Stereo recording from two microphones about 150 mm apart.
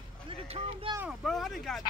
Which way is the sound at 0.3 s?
40° right (ahead or behind).